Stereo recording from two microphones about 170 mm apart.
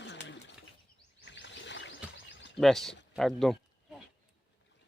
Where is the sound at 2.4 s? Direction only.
90° left.